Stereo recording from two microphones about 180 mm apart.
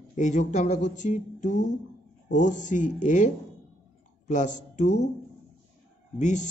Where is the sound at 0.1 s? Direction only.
45° left (ahead or behind).